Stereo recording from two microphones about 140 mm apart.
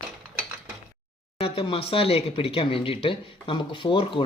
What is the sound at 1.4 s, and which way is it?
Speech, 40° left (ahead or behind).